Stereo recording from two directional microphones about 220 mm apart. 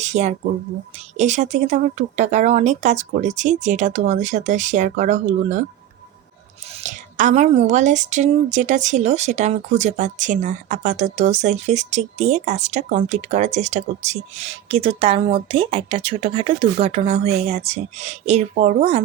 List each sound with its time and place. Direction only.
0.0 s a woman's voice: 30° right (ahead or behind)
6.8 s a woman's voice: 35° right (ahead or behind)